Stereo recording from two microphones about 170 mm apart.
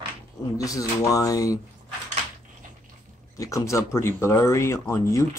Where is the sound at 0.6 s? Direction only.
20° left (ahead or behind).